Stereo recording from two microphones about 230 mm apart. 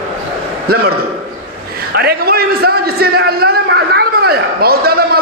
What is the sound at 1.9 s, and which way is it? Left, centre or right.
A man's voice, right.